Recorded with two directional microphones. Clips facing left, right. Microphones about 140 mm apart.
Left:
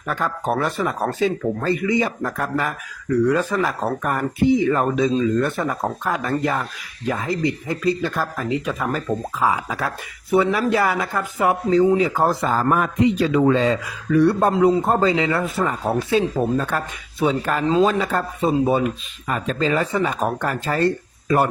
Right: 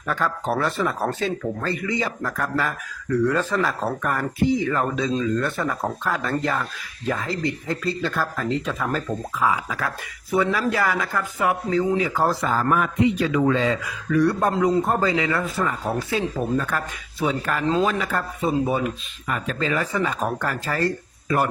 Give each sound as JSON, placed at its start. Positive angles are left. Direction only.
{"t": 0.1, "sound": "speech", "side_deg": 20}
{"t": 9.5, "sound": "speech", "side_deg": 25}
{"t": 12.1, "sound": "speech", "side_deg": 20}
{"t": 12.5, "sound": "a man's voice", "side_deg": 35}